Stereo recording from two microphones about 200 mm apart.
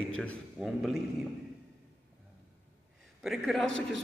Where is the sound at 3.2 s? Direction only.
Centre (ahead or behind).